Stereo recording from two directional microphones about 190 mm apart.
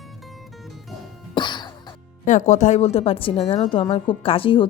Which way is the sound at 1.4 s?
25° left (ahead or behind).